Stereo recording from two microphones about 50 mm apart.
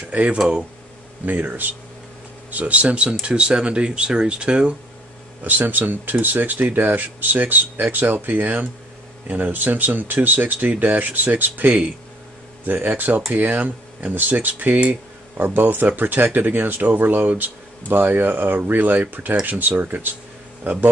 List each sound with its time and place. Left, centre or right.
0.1 s speech: right
1.2 s speech: right
5.4 s speech: right
14.8 s a sound: right
15.4 s speech: right